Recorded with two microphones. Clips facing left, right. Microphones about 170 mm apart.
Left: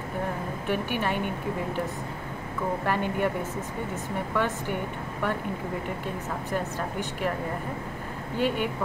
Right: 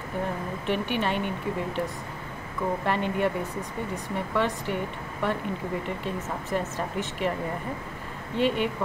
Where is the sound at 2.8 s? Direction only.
5° left (ahead or behind).